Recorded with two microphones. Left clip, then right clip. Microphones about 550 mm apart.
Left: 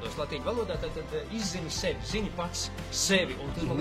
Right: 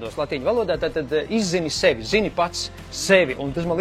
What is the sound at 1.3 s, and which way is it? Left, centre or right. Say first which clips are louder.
Speech: right 12 dB; right.